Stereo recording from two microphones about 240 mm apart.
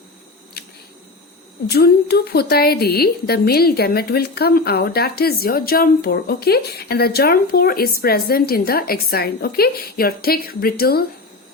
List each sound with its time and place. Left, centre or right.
0.6 s camera: left
1.6 s a woman's voice: left